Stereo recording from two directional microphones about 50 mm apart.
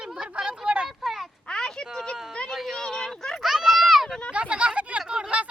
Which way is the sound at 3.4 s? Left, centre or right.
Centre.